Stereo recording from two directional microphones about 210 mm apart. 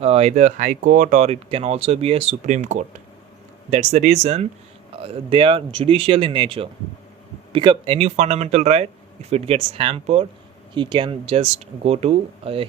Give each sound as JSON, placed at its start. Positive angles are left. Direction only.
{"t": 0.0, "sound": "speech", "side_deg": -30}